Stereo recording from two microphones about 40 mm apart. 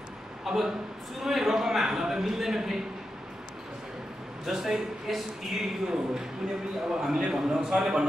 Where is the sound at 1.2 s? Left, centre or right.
Centre.